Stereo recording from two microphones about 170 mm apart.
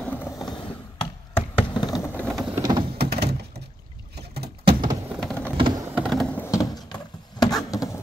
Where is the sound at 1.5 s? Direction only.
25° left (ahead or behind).